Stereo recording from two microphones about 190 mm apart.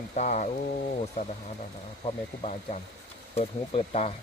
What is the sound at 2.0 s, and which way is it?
Speech, 35° left (ahead or behind).